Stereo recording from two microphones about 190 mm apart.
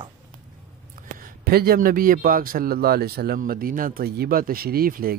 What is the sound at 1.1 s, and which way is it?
A man's voice, 50° right (ahead or behind).